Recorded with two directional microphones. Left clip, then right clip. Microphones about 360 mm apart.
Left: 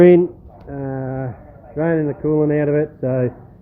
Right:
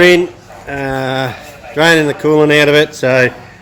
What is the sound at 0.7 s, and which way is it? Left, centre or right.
Speech, centre.